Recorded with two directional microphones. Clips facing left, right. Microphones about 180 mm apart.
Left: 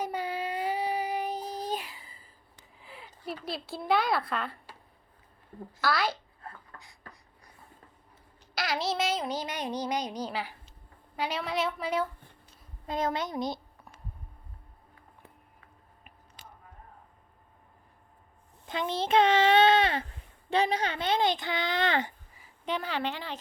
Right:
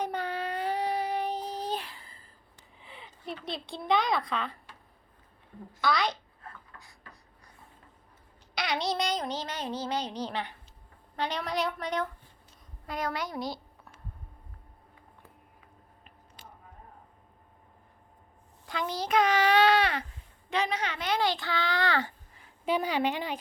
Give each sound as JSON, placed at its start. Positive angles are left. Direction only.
{"t": 0.0, "sound": "child singing", "side_deg": 10}
{"t": 2.7, "sound": "speech", "side_deg": 0}
{"t": 5.8, "sound": "a woman's voice", "side_deg": 5}
{"t": 6.7, "sound": "beatboxing", "side_deg": 45}
{"t": 8.5, "sound": "a sound", "side_deg": 0}
{"t": 11.2, "sound": "a woman's voice", "side_deg": 5}
{"t": 12.9, "sound": "a woman's voice", "side_deg": 25}
{"t": 18.6, "sound": "a child's voice", "side_deg": 20}
{"t": 22.6, "sound": "speech", "side_deg": -10}